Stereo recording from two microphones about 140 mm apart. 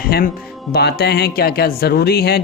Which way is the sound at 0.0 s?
90° left.